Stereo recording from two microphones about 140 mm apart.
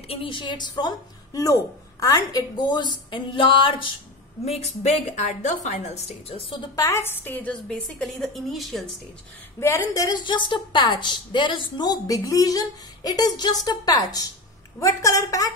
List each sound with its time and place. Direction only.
0.1 s a woman's voice: 40° left (ahead or behind)
4.5 s a woman's voice: 50° left (ahead or behind)
6.7 s a woman's voice: 25° left (ahead or behind); by 8.9 s centre (ahead or behind)
9.6 s a woman's voice: 20° left (ahead or behind)